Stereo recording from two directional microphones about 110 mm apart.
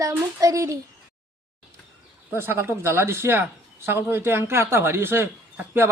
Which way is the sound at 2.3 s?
20° right (ahead or behind).